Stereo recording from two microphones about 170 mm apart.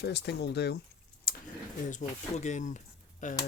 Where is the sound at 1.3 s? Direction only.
60° left (ahead or behind).